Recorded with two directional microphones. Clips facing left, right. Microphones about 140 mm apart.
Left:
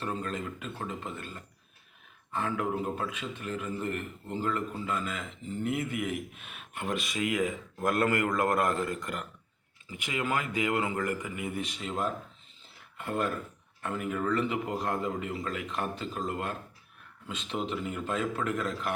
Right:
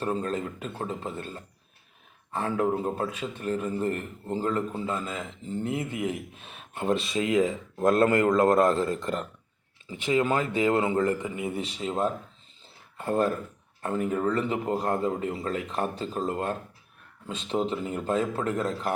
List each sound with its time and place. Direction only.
0.0 s a man's voice: 35° right (ahead or behind)